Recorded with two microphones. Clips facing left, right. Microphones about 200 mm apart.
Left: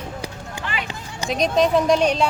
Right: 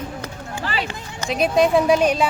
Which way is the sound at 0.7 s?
35° right (ahead or behind).